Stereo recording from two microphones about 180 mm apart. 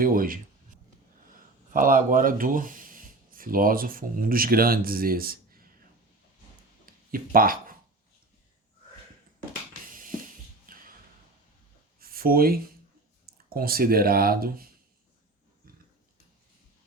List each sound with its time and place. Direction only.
0.0 s speech: 50° right (ahead or behind)
1.7 s speech: 50° right (ahead or behind)
7.1 s speech: 50° right (ahead or behind)
9.8 s a sound: 50° right (ahead or behind)
11.9 s a sound: 55° right (ahead or behind)
13.5 s speech: 55° right (ahead or behind)